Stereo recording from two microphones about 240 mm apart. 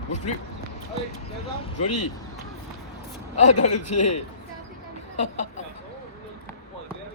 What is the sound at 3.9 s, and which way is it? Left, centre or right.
A man's voice, left.